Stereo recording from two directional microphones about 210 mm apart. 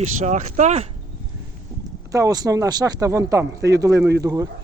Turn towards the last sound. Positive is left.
turn(degrees=-15)  # may be behind; listen again after turning